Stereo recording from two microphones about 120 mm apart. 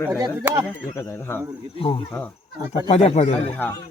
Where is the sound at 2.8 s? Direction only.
60° left (ahead or behind).